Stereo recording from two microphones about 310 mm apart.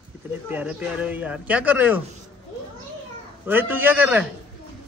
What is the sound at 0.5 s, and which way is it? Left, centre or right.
Speech, centre.